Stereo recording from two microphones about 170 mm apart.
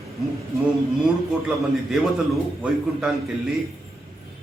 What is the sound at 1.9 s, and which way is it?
A man's voice, centre (ahead or behind).